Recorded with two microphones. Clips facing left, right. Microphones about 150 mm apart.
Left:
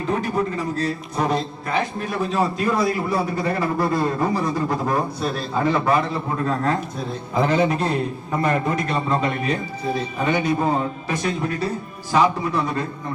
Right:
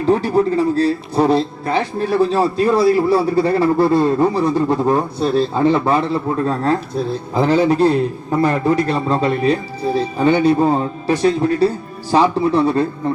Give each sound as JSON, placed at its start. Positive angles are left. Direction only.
{"t": 0.0, "sound": "a man's voice", "side_deg": -30}